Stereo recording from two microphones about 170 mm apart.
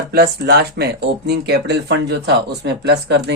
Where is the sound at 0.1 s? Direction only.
70° right (ahead or behind).